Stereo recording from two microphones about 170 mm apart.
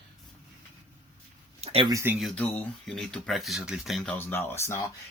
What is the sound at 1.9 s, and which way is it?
Speech, 15° right (ahead or behind).